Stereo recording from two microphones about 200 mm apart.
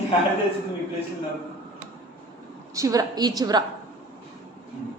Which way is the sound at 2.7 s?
15° right (ahead or behind).